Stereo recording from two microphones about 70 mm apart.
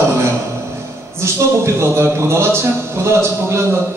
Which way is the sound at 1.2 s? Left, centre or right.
Right.